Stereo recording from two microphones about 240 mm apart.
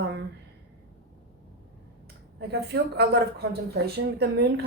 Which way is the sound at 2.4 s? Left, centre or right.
Right.